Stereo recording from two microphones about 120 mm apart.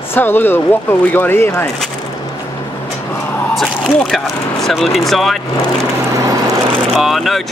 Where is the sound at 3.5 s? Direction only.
5° left (ahead or behind).